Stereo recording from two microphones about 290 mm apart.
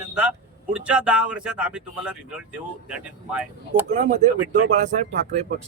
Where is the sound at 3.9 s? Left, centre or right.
Right.